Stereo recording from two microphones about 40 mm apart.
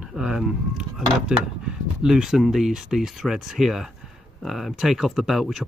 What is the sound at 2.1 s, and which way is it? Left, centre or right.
Speech, centre.